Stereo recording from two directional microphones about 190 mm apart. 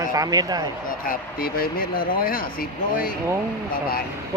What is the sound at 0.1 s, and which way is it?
Speech, 20° right (ahead or behind).